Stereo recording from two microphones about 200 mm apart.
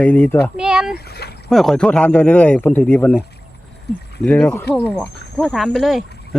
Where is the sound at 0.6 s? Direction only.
5° right (ahead or behind).